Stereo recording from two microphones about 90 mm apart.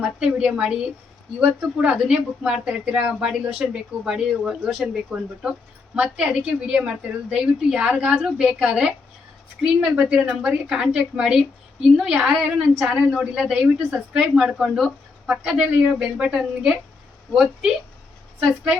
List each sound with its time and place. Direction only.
0.0 s a woman's voice: 10° right (ahead or behind)
9.9 s a woman's voice: 10° right (ahead or behind)